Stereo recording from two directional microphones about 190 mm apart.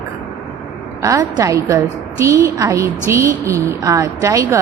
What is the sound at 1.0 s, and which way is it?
A woman's voice, 20° right (ahead or behind).